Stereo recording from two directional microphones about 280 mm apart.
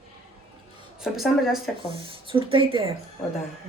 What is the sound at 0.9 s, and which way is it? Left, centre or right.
Speech, centre.